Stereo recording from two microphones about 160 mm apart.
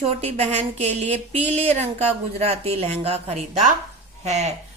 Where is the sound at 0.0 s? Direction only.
40° right (ahead or behind).